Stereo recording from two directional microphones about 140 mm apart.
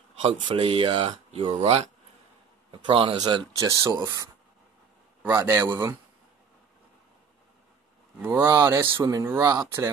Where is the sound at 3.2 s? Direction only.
25° right (ahead or behind).